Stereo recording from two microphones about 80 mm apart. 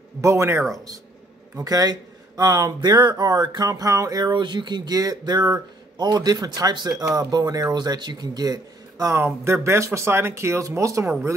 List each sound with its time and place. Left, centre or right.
0.2 s speech: right
1.6 s speech: right
4.3 s speech: right
7.7 s speech: right
9.1 s speech: right